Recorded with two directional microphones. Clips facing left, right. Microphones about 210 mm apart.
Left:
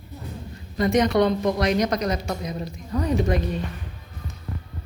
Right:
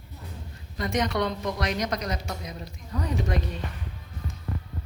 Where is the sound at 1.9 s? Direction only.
45° left (ahead or behind).